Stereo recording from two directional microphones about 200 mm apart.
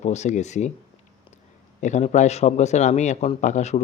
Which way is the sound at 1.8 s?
35° left (ahead or behind).